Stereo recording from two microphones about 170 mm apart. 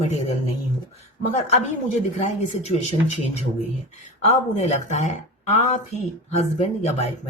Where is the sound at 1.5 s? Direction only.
45° left (ahead or behind).